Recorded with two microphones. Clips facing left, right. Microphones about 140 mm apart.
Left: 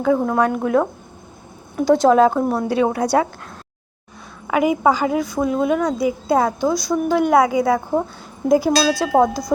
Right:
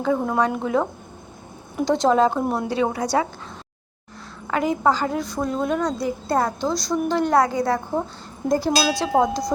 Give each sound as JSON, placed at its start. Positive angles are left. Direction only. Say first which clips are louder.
{"t": 0.0, "sound": "a woman's voice", "louder": "left 4 dB", "side_deg": 5}
{"t": 4.4, "sound": "a woman's voice", "louder": "left 4 dB", "side_deg": 10}
{"t": 8.7, "sound": "a sound", "louder": "left 4 dB", "side_deg": -20}
{"t": 9.1, "sound": "a woman's voice", "louder": "left 3 dB", "side_deg": 5}